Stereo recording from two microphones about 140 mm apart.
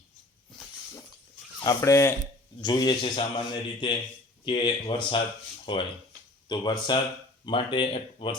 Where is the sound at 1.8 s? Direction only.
20° left (ahead or behind).